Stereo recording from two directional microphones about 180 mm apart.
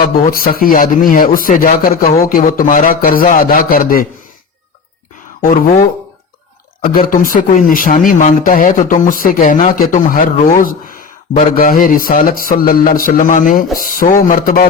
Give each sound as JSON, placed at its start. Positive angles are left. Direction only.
{"t": 0.3, "sound": "speech", "side_deg": 55}
{"t": 5.4, "sound": "speech", "side_deg": 45}
{"t": 6.8, "sound": "speech", "side_deg": 55}